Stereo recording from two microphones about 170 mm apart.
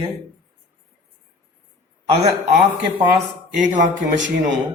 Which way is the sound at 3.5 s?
50° right (ahead or behind).